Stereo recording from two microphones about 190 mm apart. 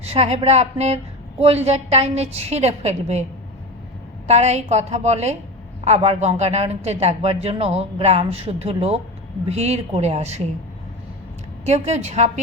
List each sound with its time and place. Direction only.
0.0 s a woman's voice: 35° right (ahead or behind)
4.3 s a woman's voice: 35° right (ahead or behind)
11.6 s a woman's voice: 35° right (ahead or behind)